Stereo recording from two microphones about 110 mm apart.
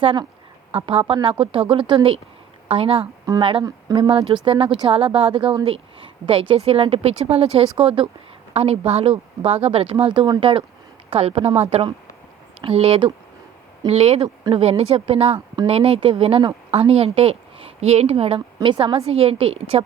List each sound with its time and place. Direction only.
0.0 s a woman's voice: 50° right (ahead or behind)
3.6 s speech: 40° right (ahead or behind)
4.1 s a woman's voice: 60° right (ahead or behind)
6.6 s a woman's voice: 60° right (ahead or behind)
8.5 s a woman's voice: 70° right (ahead or behind); by 10.5 s 45° right (ahead or behind)
11.1 s a woman's voice: 70° right (ahead or behind)
13.8 s a woman's voice: 70° right (ahead or behind)